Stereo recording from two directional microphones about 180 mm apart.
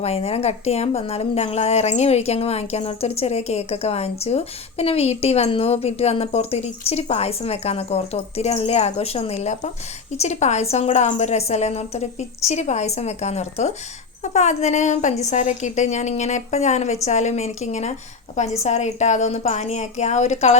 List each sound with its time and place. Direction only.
0.0 s a woman's voice: 35° left (ahead or behind)